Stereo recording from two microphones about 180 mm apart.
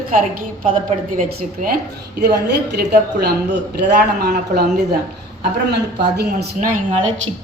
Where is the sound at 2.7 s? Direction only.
65° right (ahead or behind).